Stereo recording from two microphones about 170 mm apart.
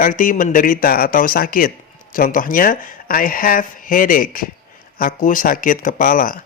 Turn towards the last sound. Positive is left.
turn(degrees=55)  # may be behind; listen again after turning